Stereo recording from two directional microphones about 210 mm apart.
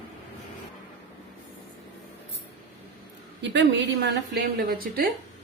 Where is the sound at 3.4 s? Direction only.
60° right (ahead or behind).